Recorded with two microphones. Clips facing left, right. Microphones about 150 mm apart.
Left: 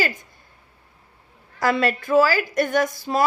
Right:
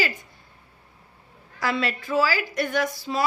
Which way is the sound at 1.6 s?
45° left (ahead or behind).